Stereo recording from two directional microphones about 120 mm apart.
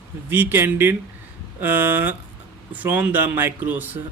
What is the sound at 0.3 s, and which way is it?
A man's voice, 20° right (ahead or behind).